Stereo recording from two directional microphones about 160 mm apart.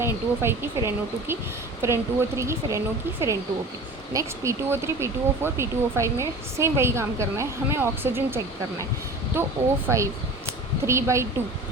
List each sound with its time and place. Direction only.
0.0 s speech: 15° right (ahead or behind)